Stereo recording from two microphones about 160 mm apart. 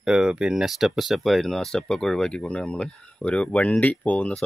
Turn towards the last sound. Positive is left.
turn(degrees=10)  # may be behind; listen again after turning